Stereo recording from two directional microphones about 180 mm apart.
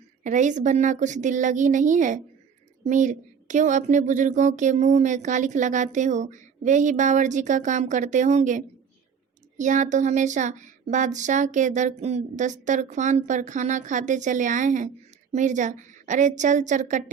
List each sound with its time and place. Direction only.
0.2 s speech: 45° right (ahead or behind)